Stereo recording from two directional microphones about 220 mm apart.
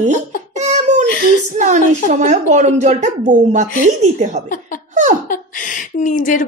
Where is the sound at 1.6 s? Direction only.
35° right (ahead or behind).